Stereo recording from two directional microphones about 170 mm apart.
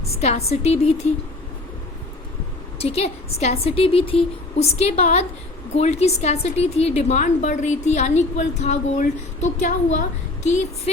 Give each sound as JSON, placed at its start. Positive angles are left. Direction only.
{"t": 0.1, "sound": "a woman's voice", "side_deg": 40}
{"t": 2.7, "sound": "a woman's voice", "side_deg": 35}